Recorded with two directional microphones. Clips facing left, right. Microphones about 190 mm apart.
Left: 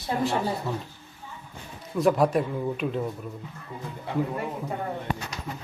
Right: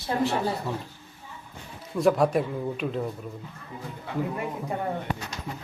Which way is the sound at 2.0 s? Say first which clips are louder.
Even; centre (ahead or behind).